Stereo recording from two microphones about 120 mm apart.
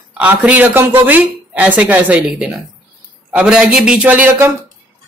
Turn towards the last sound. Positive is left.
turn(degrees=-15)  # may be behind; listen again after turning